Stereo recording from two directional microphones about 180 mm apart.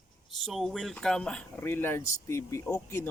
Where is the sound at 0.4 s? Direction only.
Centre (ahead or behind).